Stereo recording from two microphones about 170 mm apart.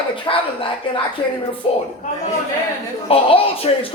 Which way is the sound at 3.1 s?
35° left (ahead or behind).